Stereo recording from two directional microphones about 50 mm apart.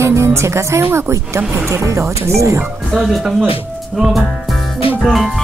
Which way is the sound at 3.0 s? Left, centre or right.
Centre.